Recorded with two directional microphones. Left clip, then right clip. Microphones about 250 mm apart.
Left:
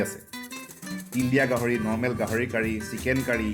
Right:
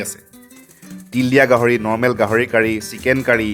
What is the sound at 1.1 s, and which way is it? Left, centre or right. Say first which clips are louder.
Speech: right 11 dB; right.